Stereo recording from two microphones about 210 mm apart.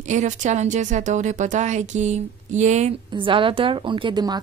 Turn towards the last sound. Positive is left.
turn(degrees=-20)  # may be behind; listen again after turning